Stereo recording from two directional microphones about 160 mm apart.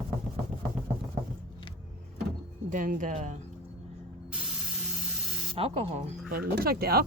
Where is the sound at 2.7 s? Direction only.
55° right (ahead or behind).